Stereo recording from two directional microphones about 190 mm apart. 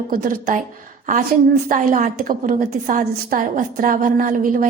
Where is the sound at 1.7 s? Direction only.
45° right (ahead or behind).